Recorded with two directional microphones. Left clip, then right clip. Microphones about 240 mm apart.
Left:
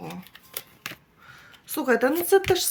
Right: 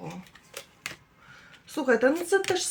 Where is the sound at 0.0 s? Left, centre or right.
Left.